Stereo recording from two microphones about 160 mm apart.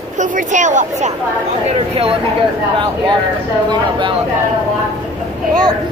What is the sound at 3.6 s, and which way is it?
Speech, 30° right (ahead or behind).